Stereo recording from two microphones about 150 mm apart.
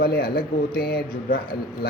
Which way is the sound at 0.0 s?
90° left.